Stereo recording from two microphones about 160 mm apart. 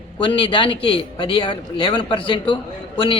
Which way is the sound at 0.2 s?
30° left (ahead or behind).